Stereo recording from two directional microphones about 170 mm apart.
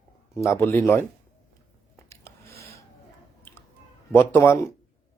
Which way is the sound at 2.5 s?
65° right (ahead or behind).